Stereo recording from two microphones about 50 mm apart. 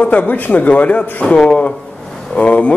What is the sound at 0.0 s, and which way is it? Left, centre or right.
A man's voice, left.